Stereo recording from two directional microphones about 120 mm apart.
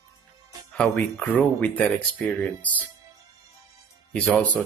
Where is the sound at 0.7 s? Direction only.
10° left (ahead or behind).